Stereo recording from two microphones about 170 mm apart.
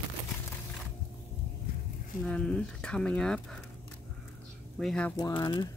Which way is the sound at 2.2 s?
5° left (ahead or behind).